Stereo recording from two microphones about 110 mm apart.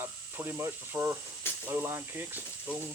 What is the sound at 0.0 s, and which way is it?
Speech, 20° right (ahead or behind).